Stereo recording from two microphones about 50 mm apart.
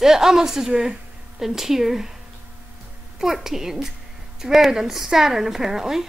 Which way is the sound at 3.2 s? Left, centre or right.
Centre.